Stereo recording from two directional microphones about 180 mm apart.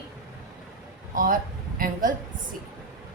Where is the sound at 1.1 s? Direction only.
50° right (ahead or behind).